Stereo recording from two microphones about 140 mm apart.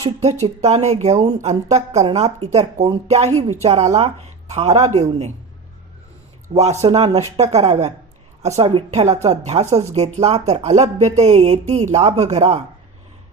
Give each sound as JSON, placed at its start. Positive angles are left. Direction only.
{"t": 0.4, "sound": "a woman's voice", "side_deg": -50}
{"t": 6.5, "sound": "a woman's voice", "side_deg": -50}